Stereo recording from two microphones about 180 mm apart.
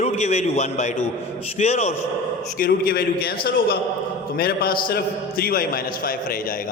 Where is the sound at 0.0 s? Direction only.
40° left (ahead or behind).